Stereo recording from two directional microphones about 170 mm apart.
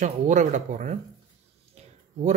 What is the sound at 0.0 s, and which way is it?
Speech, 45° right (ahead or behind).